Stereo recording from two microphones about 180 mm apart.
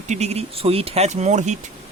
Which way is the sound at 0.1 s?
35° right (ahead or behind).